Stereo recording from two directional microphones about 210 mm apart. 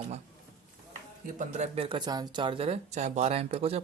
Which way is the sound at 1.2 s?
35° right (ahead or behind).